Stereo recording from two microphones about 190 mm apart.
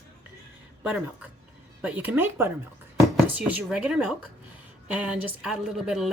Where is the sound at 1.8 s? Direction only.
10° right (ahead or behind).